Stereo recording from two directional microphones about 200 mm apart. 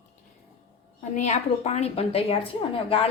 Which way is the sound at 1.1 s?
35° left (ahead or behind).